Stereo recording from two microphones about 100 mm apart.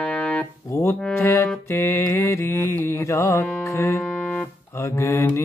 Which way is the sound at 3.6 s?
30° left (ahead or behind).